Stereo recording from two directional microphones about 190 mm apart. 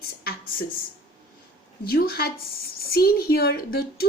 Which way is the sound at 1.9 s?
55° left (ahead or behind).